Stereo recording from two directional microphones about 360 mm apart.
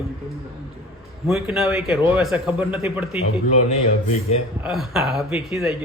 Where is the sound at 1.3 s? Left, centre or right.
Centre.